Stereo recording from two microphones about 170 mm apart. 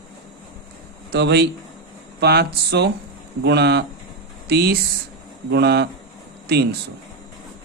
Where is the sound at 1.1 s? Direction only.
75° right (ahead or behind).